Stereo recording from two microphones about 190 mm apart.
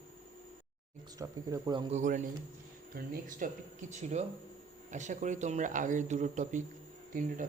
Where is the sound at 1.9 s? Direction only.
40° right (ahead or behind).